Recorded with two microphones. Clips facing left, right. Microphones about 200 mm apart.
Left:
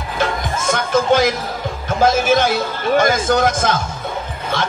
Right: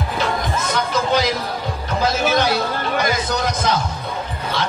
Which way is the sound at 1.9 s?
50° left (ahead or behind).